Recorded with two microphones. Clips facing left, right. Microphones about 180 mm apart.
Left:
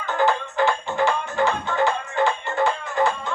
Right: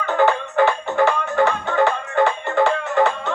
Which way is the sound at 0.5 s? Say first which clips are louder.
Right 4 dB; 60° right (ahead or behind).